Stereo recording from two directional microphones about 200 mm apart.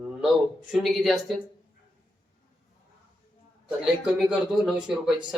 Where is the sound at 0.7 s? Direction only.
Centre (ahead or behind).